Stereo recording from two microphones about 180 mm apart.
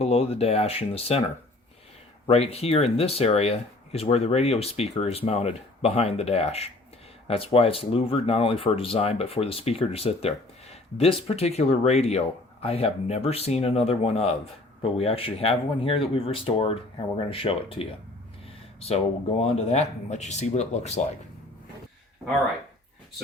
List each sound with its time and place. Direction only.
0.0 s speech: 35° left (ahead or behind)
2.2 s speech: 35° left (ahead or behind)